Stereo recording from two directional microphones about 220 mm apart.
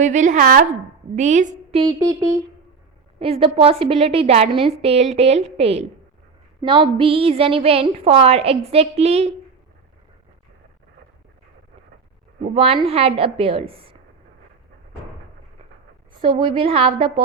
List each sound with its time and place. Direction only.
0.0 s a woman's voice: 35° right (ahead or behind)
1.8 s a sound: 15° right (ahead or behind)
3.2 s a woman's voice: 25° right (ahead or behind)
12.4 s a woman's voice: 25° right (ahead or behind)
16.2 s a woman's voice: 25° right (ahead or behind)